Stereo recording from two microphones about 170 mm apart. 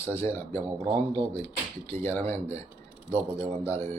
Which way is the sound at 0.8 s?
25° right (ahead or behind).